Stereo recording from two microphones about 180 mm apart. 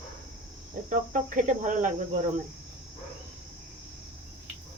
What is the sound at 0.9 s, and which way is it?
Speech, 45° right (ahead or behind).